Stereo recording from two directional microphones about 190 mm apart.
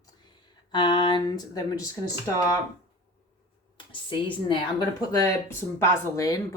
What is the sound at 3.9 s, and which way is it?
A woman's voice, 25° left (ahead or behind).